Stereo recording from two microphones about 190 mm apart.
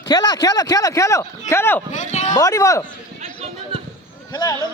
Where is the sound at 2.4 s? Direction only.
20° left (ahead or behind).